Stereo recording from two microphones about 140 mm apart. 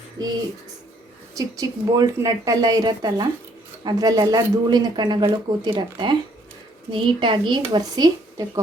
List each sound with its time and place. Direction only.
0.2 s speech: 25° right (ahead or behind)
1.4 s speech: 25° right (ahead or behind)